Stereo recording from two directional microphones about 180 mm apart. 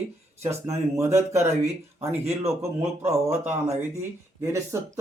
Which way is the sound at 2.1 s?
35° right (ahead or behind).